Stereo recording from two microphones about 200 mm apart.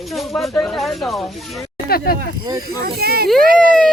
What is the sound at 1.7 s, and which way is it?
Speech, 50° left (ahead or behind).